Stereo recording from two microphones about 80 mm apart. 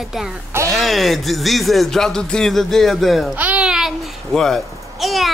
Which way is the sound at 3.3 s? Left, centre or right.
Right.